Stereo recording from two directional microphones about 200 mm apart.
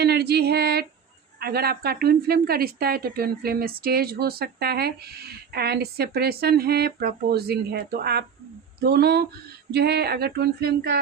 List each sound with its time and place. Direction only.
0.0 s female singing: 55° right (ahead or behind)
1.4 s a woman's voice: 50° right (ahead or behind)